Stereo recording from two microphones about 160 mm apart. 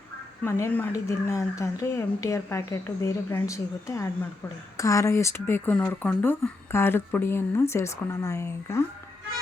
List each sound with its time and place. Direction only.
0.4 s speech: 15° left (ahead or behind)